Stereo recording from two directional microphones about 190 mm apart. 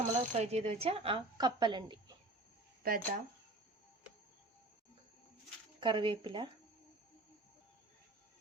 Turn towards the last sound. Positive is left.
turn(degrees=-25)  # may be behind; listen again after turning